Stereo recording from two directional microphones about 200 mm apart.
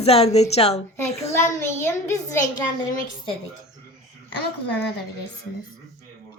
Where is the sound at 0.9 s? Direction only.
15° left (ahead or behind).